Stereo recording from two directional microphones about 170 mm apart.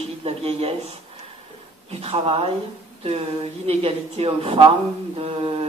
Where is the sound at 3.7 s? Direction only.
35° right (ahead or behind).